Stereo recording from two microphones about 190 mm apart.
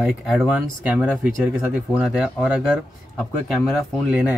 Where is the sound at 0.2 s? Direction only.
Centre (ahead or behind).